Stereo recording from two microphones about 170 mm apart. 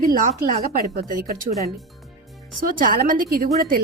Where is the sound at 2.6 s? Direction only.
55° right (ahead or behind).